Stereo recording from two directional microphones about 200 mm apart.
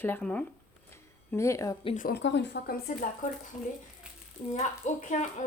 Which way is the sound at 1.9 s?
45° left (ahead or behind).